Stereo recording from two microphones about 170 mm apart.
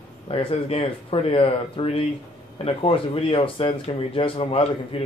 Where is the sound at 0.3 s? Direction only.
35° left (ahead or behind).